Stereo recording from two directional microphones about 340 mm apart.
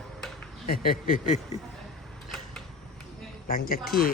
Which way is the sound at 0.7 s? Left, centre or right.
Left.